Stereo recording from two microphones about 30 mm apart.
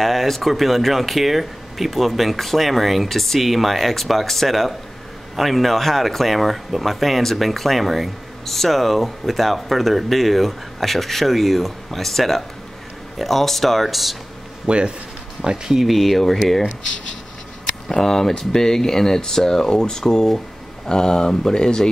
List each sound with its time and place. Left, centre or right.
0.0 s speech: centre
14.7 s speech: right
15.5 s speech: centre
15.8 s speech: centre
17.8 s speech: centre